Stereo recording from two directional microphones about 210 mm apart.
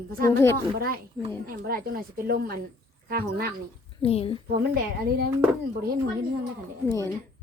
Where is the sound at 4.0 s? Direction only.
25° left (ahead or behind).